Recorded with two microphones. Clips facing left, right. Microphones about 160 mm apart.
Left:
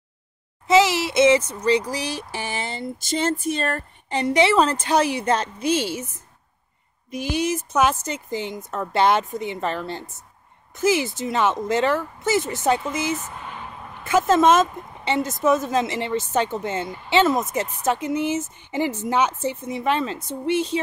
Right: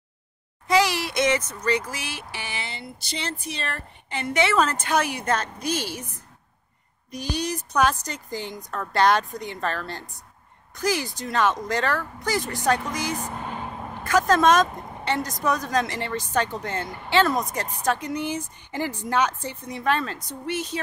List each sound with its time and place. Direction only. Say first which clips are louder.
0.7 s a woman's voice: left 4 dB; 20° left (ahead or behind)
7.1 s a woman's voice: left 5 dB; 20° left (ahead or behind)